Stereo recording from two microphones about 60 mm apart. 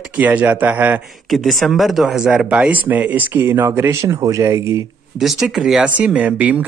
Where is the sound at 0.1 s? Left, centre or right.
Right.